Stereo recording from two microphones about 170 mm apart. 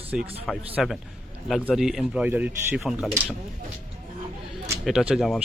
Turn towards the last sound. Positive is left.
turn(degrees=0)  # may be behind; listen again after turning